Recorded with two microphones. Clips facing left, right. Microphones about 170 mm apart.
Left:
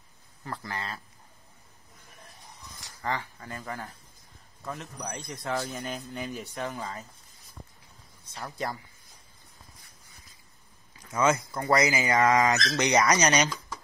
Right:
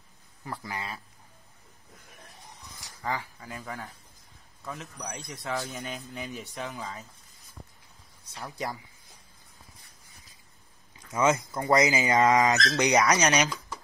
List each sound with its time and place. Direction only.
0.4 s speech: 15° right (ahead or behind)
3.0 s a man's voice: centre (ahead or behind)
11.1 s speech: 20° right (ahead or behind)
13.0 s a man's voice: centre (ahead or behind)